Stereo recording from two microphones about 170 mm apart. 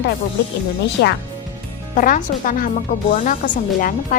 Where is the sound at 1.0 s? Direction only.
90° left.